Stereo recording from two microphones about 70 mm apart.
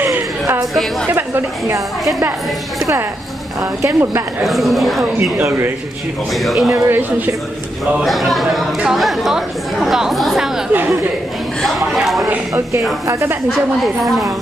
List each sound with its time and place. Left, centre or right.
0.0 s a sound: right
1.0 s speech: right
3.8 s speech: right
4.5 s speech: centre
6.3 s speech: centre
6.7 s speech: right
8.0 s speech: centre
10.7 s speech: right
11.6 s speech: centre
13.0 s speech: right
13.5 s speech: centre